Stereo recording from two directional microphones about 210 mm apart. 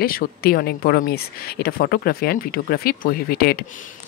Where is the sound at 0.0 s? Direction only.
45° left (ahead or behind).